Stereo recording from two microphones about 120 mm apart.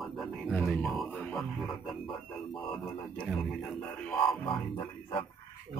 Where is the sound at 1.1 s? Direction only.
10° left (ahead or behind).